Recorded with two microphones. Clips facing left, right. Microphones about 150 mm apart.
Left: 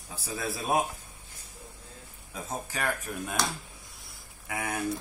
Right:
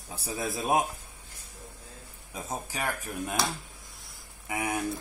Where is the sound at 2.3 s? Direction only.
10° right (ahead or behind).